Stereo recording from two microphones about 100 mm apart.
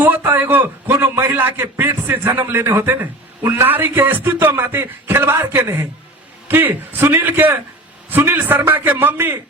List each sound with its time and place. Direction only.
0.0 s a man's voice: 25° right (ahead or behind)